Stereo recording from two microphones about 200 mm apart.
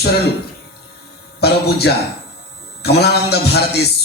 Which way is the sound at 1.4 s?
55° left (ahead or behind).